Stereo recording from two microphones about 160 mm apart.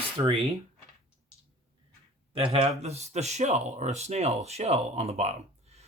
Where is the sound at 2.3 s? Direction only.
35° right (ahead or behind).